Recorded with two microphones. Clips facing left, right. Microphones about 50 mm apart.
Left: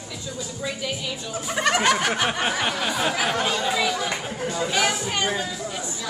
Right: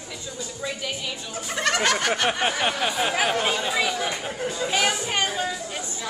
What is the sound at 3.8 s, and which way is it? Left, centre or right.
Chatter, centre.